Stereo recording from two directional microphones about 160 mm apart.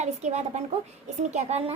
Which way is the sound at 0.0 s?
45° right (ahead or behind).